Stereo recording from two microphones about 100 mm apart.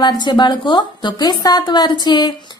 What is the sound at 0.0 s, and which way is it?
A woman's voice, 50° left (ahead or behind).